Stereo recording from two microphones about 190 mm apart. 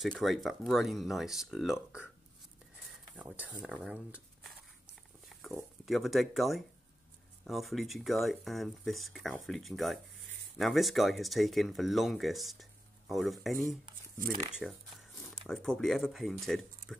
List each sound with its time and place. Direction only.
0.0 s speech: centre (ahead or behind)
14.3 s speech: 30° right (ahead or behind)
15.2 s speech: centre (ahead or behind)